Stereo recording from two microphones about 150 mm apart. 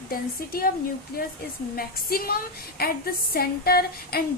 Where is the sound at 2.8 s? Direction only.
90° left.